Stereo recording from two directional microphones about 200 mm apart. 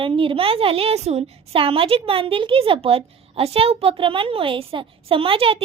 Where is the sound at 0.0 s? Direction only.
25° right (ahead or behind).